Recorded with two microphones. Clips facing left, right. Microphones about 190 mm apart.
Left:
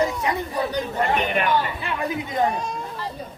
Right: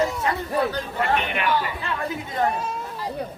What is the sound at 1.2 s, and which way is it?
Speech, 40° left (ahead or behind).